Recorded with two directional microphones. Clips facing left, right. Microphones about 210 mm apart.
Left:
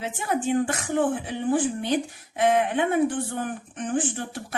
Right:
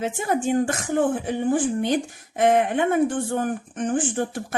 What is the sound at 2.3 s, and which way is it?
Speech, 45° right (ahead or behind).